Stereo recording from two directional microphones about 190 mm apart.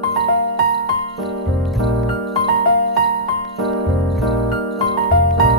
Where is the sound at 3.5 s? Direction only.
Centre (ahead or behind).